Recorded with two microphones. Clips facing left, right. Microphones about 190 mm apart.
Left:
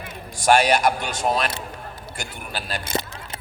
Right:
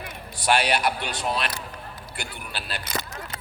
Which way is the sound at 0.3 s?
45° left (ahead or behind).